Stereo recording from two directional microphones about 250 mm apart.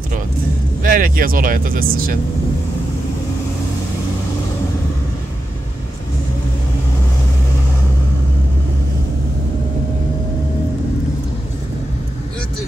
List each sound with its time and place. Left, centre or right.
0.8 s speech: right